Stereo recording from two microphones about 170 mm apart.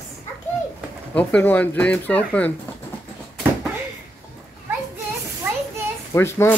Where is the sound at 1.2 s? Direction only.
10° left (ahead or behind).